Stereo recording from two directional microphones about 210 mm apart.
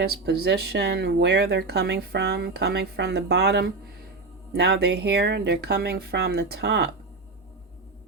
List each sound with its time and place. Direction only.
0.0 s speech: 50° right (ahead or behind)